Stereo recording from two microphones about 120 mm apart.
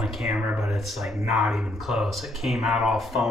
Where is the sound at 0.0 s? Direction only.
5° right (ahead or behind).